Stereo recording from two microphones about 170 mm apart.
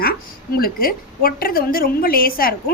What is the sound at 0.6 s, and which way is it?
A woman's voice, 60° left (ahead or behind).